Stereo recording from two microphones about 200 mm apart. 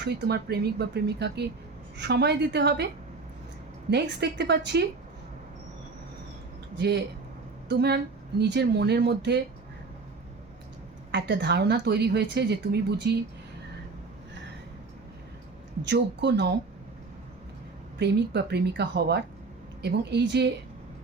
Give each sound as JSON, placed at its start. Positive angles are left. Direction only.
{"t": 0.0, "sound": "speech", "side_deg": -55}
{"t": 3.8, "sound": "speech", "side_deg": -55}
{"t": 6.7, "sound": "speech", "side_deg": -55}
{"t": 11.1, "sound": "speech", "side_deg": -55}
{"t": 15.8, "sound": "speech", "side_deg": -60}
{"t": 18.0, "sound": "speech", "side_deg": -55}